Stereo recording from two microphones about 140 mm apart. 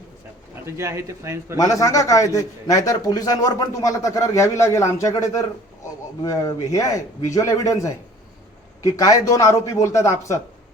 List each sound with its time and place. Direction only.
0.6 s speech: 20° right (ahead or behind)
1.5 s a man's voice: 25° left (ahead or behind)